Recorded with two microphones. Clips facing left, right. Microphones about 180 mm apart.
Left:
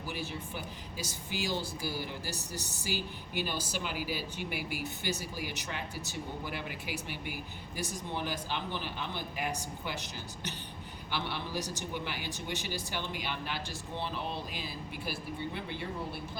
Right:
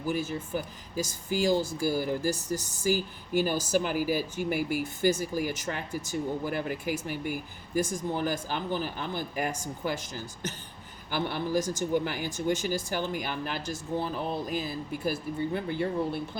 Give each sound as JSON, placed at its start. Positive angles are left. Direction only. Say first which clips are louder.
{"t": 0.1, "sound": "speech", "louder": "right 9 dB", "side_deg": -45}